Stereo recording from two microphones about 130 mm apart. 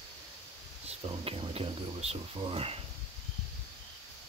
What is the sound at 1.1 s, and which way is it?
Speech, 45° right (ahead or behind).